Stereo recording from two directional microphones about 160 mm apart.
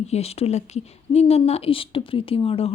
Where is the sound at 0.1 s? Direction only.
40° left (ahead or behind).